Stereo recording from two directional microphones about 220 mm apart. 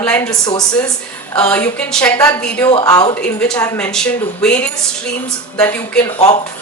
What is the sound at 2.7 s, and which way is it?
Speech, 15° left (ahead or behind).